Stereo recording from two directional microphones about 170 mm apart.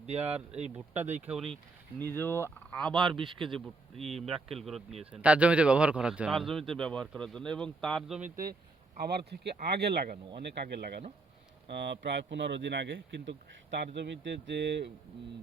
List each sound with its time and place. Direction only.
0.0 s speech: 35° right (ahead or behind)
1.3 s a man's voice: centre (ahead or behind)
2.0 s fowl: 10° left (ahead or behind)
3.2 s a man's voice: 30° right (ahead or behind)
4.3 s a man's voice: centre (ahead or behind)
8.2 s speech: 55° right (ahead or behind)
9.0 s speech: 75° right (ahead or behind)
11.7 s speech: 90° right